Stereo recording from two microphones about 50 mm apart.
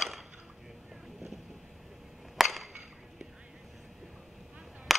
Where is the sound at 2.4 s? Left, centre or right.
Centre.